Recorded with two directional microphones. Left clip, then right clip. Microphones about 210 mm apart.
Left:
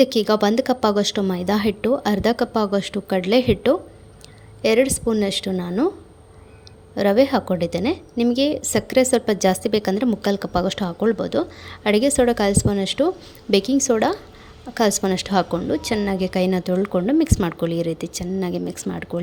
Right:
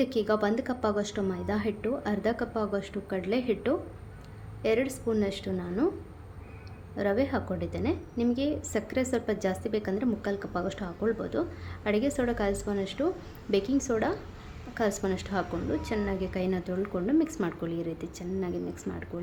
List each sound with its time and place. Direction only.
0.0 s a woman's voice: 40° left (ahead or behind)
6.9 s a woman's voice: 40° left (ahead or behind)